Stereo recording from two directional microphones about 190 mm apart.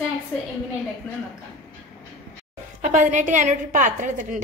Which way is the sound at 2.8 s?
40° right (ahead or behind).